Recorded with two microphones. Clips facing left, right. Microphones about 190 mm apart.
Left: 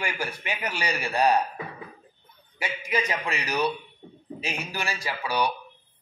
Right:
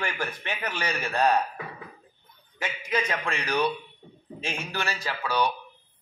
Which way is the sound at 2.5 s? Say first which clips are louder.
Even; 10° left (ahead or behind).